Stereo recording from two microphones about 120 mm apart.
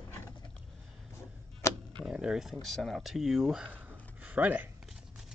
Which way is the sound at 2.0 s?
5° right (ahead or behind).